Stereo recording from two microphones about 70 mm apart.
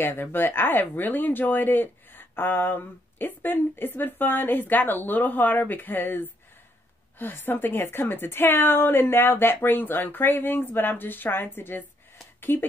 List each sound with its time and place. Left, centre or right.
0.0 s a woman's voice: left